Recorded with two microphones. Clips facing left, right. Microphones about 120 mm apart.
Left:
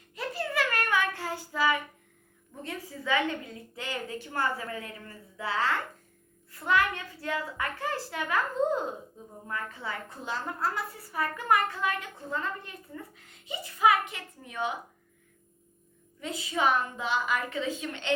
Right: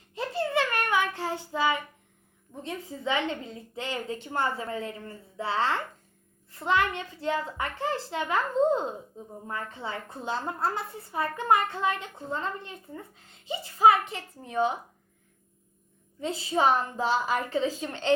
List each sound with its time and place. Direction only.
0.1 s child singing: 25° right (ahead or behind)
2.6 s a child's voice: 25° right (ahead or behind)
16.2 s a woman's voice: 30° right (ahead or behind)